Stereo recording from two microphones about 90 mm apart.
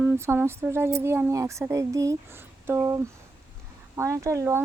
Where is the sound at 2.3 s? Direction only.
25° right (ahead or behind).